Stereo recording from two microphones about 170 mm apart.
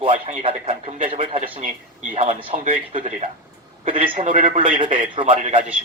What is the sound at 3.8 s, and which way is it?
Speech, 35° right (ahead or behind).